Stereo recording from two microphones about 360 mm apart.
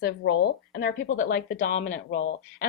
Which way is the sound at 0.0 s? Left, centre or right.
Left.